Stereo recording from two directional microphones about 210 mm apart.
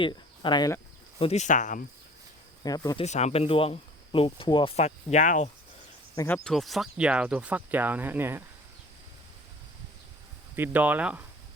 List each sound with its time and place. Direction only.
0.0 s cricket: 20° left (ahead or behind)
1.2 s speech: 30° left (ahead or behind)
2.6 s speech: 20° left (ahead or behind)
3.0 s speech: 30° left (ahead or behind)
6.1 s speech: 10° left (ahead or behind); by 8.4 s 10° right (ahead or behind)
10.5 s speech: 10° right (ahead or behind)